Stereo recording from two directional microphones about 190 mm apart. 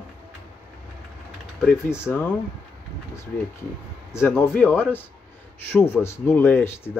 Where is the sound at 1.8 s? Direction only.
10° left (ahead or behind).